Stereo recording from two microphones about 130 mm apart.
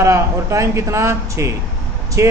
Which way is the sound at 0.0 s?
25° right (ahead or behind).